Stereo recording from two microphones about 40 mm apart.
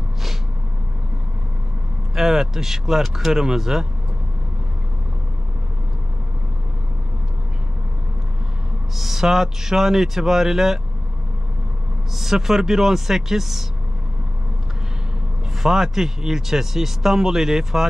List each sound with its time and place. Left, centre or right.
2.1 s speech: centre
8.9 s speech: centre
12.2 s speech: centre
15.6 s speech: centre